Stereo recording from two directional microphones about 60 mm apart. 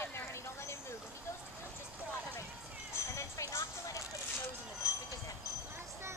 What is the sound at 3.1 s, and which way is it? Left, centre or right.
Music, left.